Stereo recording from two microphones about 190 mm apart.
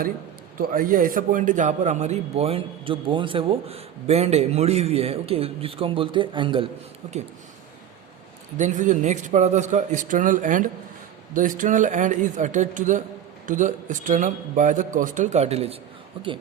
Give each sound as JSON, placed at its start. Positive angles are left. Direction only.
{"t": 0.6, "sound": "a man's voice", "side_deg": -45}
{"t": 7.0, "sound": "a man's voice", "side_deg": -35}
{"t": 8.5, "sound": "a man's voice", "side_deg": -40}